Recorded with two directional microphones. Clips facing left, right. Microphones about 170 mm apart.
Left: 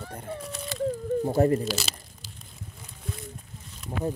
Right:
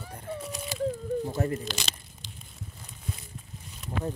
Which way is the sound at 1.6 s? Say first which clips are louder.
Left 6 dB; 5° left (ahead or behind).